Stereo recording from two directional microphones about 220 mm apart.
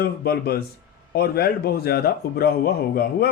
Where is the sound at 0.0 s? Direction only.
45° left (ahead or behind).